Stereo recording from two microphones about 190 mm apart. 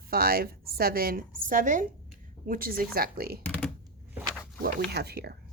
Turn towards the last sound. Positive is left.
turn(degrees=-60)  # may be behind; listen again after turning